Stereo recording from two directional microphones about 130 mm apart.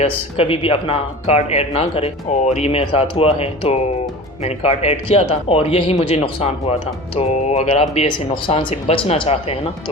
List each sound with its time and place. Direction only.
0.0 s speech: 45° left (ahead or behind)
8.0 s speech: 40° left (ahead or behind)